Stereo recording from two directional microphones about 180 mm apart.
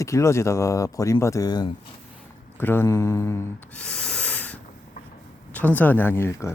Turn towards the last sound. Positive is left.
turn(degrees=15)  # may be behind; listen again after turning